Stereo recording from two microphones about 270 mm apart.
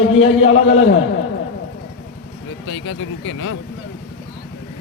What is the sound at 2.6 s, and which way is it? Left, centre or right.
Speech, left.